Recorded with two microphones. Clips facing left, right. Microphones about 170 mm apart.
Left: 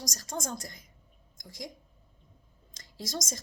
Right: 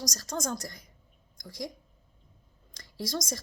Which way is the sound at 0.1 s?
20° left (ahead or behind).